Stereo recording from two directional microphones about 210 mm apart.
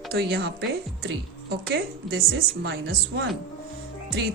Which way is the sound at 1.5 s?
50° right (ahead or behind).